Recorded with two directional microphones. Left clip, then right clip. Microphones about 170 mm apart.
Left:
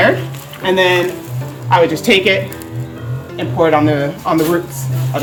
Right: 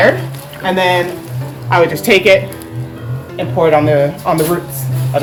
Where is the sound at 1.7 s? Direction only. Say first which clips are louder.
Right 1 dB; 50° right (ahead or behind).